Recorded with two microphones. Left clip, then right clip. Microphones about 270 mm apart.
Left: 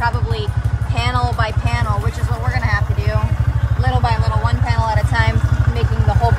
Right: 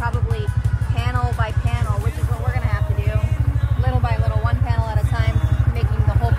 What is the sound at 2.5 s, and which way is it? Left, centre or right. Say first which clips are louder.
Vehicle: left 9 dB; left.